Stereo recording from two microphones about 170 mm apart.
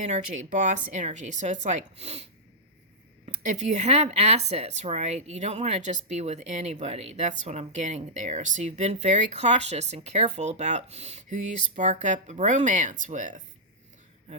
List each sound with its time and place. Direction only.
0.0 s speech: 45° right (ahead or behind)
3.2 s speech: 45° right (ahead or behind)